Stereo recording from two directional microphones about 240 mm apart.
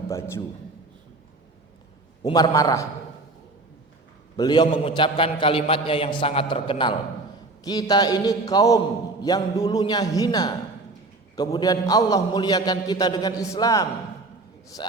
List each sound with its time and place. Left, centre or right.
0.1 s a man's voice: centre
2.2 s a man's voice: centre
4.4 s a man's voice: centre